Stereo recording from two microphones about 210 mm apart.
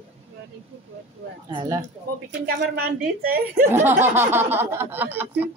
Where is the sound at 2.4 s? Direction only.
45° right (ahead or behind).